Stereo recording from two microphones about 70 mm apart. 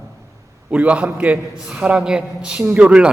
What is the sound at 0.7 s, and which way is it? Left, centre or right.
A man's voice, centre.